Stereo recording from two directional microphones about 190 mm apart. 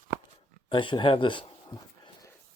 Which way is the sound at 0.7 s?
25° left (ahead or behind).